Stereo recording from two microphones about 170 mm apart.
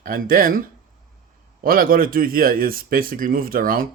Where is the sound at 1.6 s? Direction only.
55° right (ahead or behind).